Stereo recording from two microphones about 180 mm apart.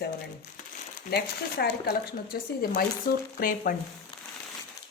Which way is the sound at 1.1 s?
65° left (ahead or behind).